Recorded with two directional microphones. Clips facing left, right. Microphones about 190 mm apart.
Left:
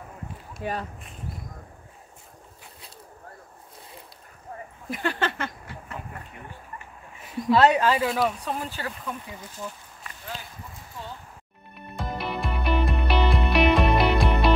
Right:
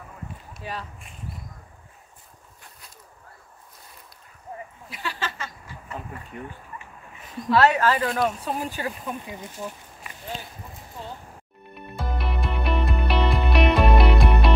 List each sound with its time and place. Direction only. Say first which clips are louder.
0.6 s speech: left 5 dB; 50° left (ahead or behind)
4.8 s speech: left 6 dB; 50° left (ahead or behind)
7.5 s speech: even; 15° left (ahead or behind)
8.3 s speech: right 2 dB; 10° right (ahead or behind)
11.9 s music: even; centre (ahead or behind)